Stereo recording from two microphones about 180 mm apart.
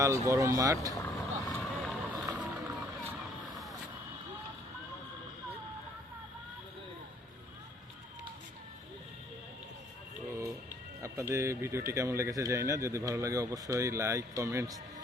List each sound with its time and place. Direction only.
0.0 s speech: 15° right (ahead or behind)
0.9 s vehicle: 10° left (ahead or behind)
11.0 s speech: 15° right (ahead or behind)